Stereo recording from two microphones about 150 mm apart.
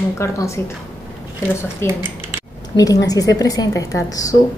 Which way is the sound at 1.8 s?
15° left (ahead or behind).